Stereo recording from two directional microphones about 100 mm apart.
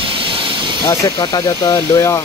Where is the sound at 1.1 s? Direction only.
40° left (ahead or behind).